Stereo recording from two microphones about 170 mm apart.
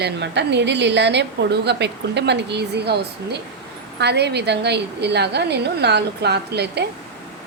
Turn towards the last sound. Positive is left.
turn(degrees=-75)  # may be behind; listen again after turning